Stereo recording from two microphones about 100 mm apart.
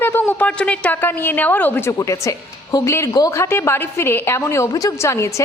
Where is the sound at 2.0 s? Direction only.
30° left (ahead or behind).